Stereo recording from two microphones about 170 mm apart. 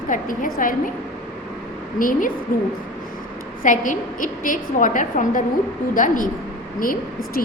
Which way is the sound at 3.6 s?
50° left (ahead or behind).